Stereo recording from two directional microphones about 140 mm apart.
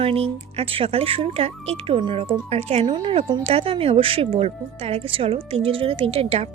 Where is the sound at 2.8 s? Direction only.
40° right (ahead or behind).